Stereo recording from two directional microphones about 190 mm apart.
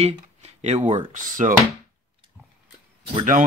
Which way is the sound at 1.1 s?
45° right (ahead or behind).